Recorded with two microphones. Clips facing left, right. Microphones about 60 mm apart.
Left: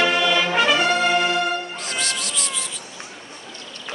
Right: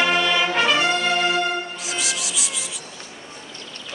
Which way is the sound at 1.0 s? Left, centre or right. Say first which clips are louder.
Left 1 dB; left.